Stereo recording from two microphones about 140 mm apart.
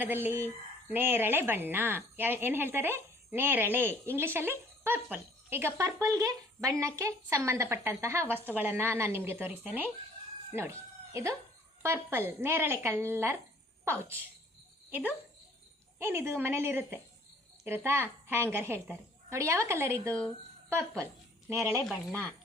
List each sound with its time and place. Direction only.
0.0 s speech: 15° right (ahead or behind)
14.8 s cricket: 15° right (ahead or behind)
16.0 s speech: 20° right (ahead or behind)
21.5 s speech: 20° right (ahead or behind)